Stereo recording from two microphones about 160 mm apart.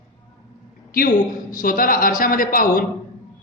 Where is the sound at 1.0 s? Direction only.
60° left (ahead or behind).